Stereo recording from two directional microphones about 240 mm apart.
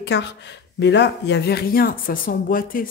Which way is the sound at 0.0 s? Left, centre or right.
Left.